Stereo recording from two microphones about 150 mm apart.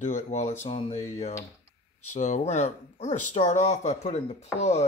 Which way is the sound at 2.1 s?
55° left (ahead or behind).